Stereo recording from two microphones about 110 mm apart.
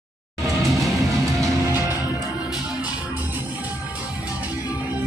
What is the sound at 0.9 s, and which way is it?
Music, 25° right (ahead or behind).